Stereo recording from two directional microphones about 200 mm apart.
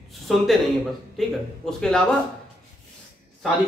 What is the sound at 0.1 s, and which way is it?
Speech, centre (ahead or behind).